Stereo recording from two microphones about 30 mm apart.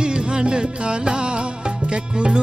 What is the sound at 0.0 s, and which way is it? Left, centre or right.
Music, right.